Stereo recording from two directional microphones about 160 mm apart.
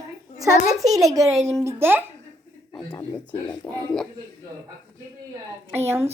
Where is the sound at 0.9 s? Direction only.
20° right (ahead or behind).